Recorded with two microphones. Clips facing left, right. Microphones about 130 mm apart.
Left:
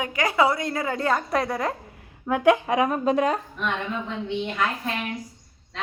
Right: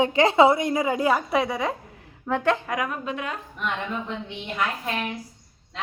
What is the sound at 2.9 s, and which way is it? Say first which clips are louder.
Speech: left 9 dB; 35° left (ahead or behind).